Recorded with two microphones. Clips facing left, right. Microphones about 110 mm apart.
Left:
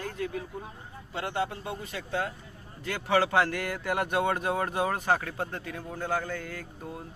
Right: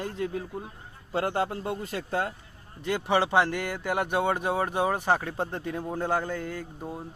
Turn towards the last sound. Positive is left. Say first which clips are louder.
# right 3 dB
turn(degrees=-25)  # may be behind; listen again after turning